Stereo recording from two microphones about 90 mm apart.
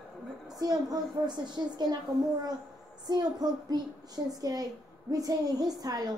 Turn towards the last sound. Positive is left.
turn(degrees=-45)  # may be behind; listen again after turning